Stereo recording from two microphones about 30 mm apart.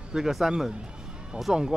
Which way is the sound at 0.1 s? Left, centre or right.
Right.